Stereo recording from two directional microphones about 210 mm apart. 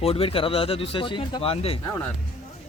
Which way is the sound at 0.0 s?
25° left (ahead or behind).